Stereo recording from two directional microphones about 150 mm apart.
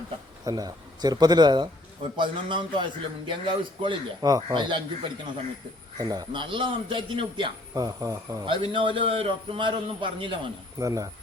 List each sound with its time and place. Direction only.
0.4 s a man's voice: 25° right (ahead or behind)
7.7 s speech: 20° right (ahead or behind)
8.4 s a man's voice: 35° right (ahead or behind)
10.8 s speech: 20° right (ahead or behind)